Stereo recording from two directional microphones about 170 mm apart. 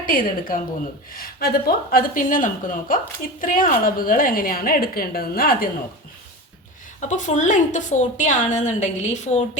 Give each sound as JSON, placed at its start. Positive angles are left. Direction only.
{"t": 0.0, "sound": "a woman's voice", "side_deg": 55}
{"t": 7.0, "sound": "a woman's voice", "side_deg": 45}